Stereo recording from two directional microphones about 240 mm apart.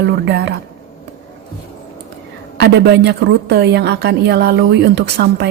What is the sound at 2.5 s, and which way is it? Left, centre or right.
A woman's voice, right.